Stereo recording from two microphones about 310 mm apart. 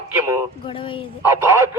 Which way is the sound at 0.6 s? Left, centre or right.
Centre.